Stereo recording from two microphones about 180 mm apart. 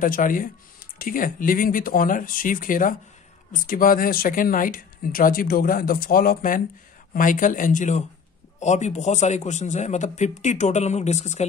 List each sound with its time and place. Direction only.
0.0 s a man's voice: 50° left (ahead or behind)